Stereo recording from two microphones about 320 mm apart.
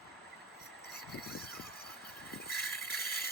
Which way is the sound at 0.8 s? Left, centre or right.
Left.